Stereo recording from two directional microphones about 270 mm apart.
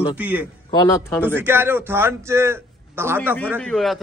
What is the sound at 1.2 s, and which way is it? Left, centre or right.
A man's voice, centre.